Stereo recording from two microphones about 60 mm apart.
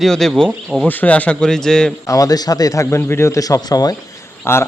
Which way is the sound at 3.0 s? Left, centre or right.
Left.